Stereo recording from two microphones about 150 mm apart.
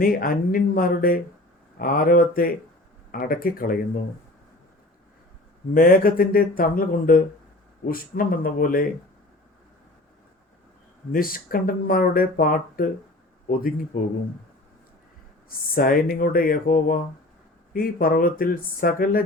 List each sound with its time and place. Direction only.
0.0 s speech: 75° left (ahead or behind)
5.7 s speech: 70° left (ahead or behind)
11.1 s speech: 75° left (ahead or behind)
15.4 s speech: 75° left (ahead or behind)